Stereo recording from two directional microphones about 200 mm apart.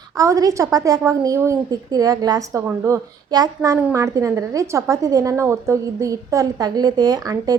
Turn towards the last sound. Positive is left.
turn(degrees=-15)  # may be behind; listen again after turning